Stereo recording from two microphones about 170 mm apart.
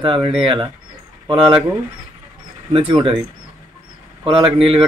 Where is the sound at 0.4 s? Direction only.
30° right (ahead or behind).